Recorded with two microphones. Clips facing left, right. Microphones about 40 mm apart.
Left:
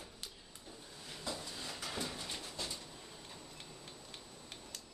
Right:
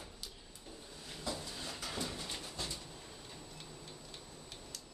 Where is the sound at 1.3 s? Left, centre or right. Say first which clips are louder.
Right 1 dB; centre.